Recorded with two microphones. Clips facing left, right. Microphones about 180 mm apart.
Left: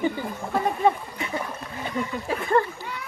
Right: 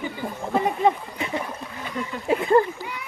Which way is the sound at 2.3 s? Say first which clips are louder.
Right 5 dB; 25° right (ahead or behind).